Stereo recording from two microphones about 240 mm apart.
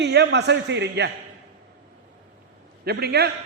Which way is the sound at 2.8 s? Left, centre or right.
Right.